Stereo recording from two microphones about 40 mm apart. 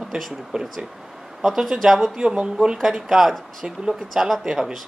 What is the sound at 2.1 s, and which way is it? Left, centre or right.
Speech, right.